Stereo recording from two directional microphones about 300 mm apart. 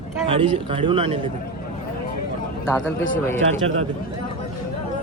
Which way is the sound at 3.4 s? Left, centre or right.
Right.